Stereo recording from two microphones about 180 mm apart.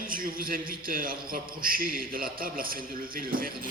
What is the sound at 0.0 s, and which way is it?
A man's voice, 50° right (ahead or behind).